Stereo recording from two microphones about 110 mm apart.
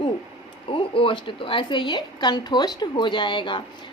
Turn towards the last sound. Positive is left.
turn(degrees=45)  # may be behind; listen again after turning